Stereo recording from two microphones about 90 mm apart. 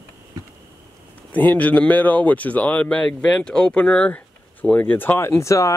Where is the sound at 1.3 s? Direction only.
20° left (ahead or behind).